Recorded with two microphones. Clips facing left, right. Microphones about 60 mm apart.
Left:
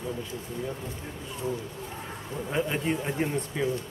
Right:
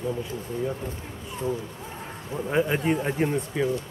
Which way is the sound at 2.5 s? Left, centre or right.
Centre.